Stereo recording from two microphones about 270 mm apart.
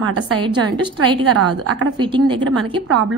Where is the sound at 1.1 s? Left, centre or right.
Right.